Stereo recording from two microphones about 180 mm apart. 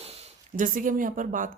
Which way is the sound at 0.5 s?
45° right (ahead or behind).